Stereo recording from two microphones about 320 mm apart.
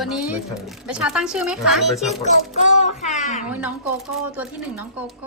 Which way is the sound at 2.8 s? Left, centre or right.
Left.